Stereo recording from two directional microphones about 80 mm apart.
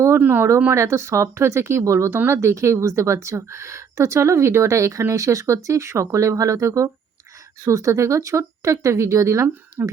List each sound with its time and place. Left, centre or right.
0.2 s speech: right